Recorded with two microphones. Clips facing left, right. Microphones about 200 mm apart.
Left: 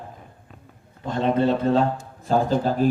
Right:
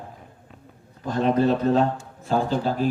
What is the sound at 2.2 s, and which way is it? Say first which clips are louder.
Speech: left 2 dB; 45° left (ahead or behind).